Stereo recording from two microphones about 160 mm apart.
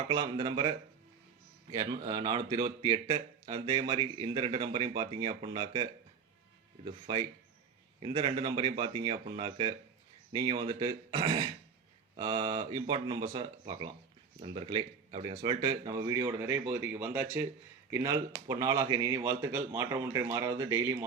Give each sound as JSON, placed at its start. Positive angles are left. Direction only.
{"t": 0.1, "sound": "speech", "side_deg": -30}